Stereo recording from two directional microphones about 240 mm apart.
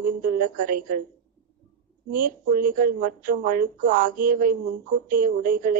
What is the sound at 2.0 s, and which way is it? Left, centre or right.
Speech, right.